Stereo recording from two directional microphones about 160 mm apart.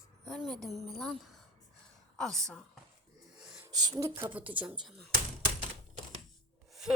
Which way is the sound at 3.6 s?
25° right (ahead or behind).